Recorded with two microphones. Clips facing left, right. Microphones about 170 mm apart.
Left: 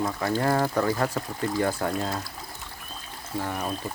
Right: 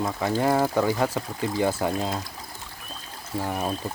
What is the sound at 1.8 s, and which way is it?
Speech, 15° right (ahead or behind).